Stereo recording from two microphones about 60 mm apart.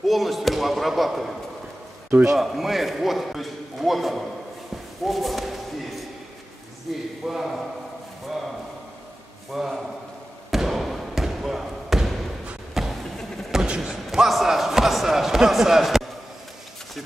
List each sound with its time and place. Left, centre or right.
0.0 s basketball bounce: centre
2.3 s a man's voice: centre
9.5 s a man's voice: centre
10.5 s basketball bounce: centre
12.7 s vehicle: centre
13.6 s speech: centre